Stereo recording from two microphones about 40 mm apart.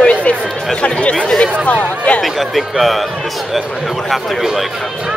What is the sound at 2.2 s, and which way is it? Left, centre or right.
Speech, centre.